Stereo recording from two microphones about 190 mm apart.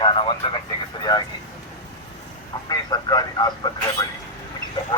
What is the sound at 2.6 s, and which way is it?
Vehicle, 20° left (ahead or behind).